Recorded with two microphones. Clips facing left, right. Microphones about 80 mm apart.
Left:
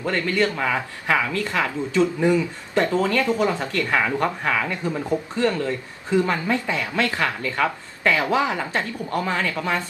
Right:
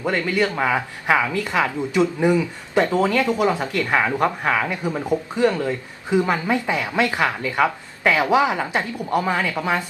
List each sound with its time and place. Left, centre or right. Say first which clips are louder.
0.0 s speech: right 1 dB; centre